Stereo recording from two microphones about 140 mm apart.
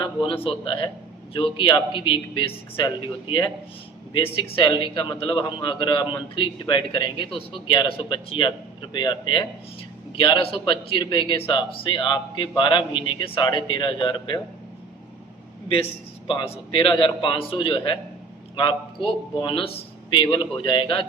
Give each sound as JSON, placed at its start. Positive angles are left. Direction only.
{"t": 0.0, "sound": "a sound", "side_deg": 35}
{"t": 0.4, "sound": "a man's voice", "side_deg": 35}
{"t": 15.7, "sound": "a man's voice", "side_deg": 40}